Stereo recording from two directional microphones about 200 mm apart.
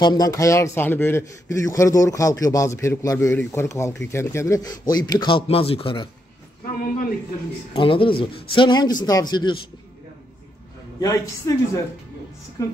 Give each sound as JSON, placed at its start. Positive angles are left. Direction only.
{"t": 0.0, "sound": "a man's voice", "side_deg": 20}
{"t": 7.8, "sound": "speech", "side_deg": 25}
{"t": 11.0, "sound": "a man's voice", "side_deg": 15}